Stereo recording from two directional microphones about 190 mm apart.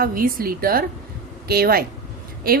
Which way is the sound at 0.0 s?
50° right (ahead or behind).